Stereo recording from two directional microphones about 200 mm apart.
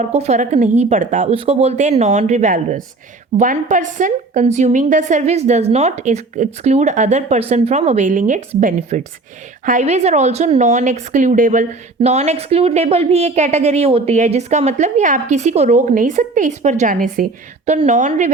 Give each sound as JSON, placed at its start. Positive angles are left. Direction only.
{"t": 0.0, "sound": "a woman's voice", "side_deg": -35}